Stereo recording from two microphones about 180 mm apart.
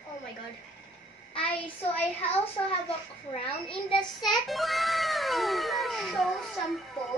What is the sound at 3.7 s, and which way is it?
Speech, 30° left (ahead or behind).